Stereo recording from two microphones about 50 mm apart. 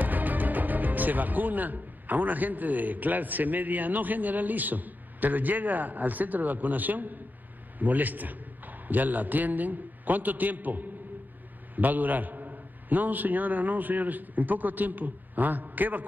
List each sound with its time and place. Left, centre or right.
0.0 s a man's voice: right